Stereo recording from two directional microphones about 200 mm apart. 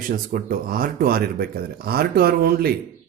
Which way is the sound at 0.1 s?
40° right (ahead or behind).